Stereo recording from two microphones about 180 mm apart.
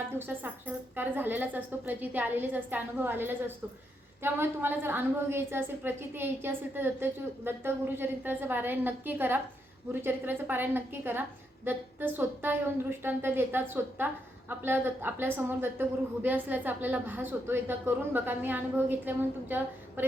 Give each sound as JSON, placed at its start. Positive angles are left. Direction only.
{"t": 0.2, "sound": "a woman's voice", "side_deg": -10}